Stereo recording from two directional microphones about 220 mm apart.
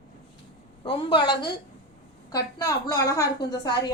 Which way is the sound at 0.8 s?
20° left (ahead or behind).